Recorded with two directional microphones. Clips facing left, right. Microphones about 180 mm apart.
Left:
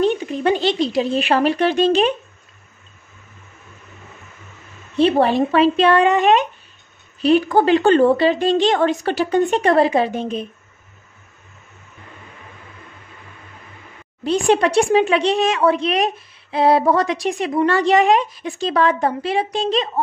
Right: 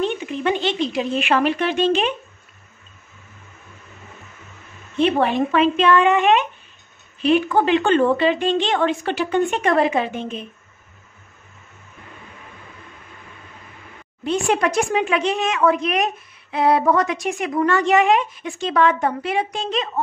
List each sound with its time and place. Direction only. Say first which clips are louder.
0.0 s speech: left 4 dB; 35° left (ahead or behind)
4.9 s speech: left 3 dB; 35° left (ahead or behind)
14.2 s speech: left 4 dB; 35° left (ahead or behind)